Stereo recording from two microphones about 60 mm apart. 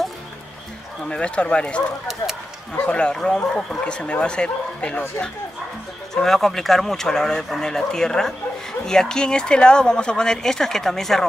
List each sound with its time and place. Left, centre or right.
1.0 s speech: centre
2.8 s speech: centre
6.1 s speech: centre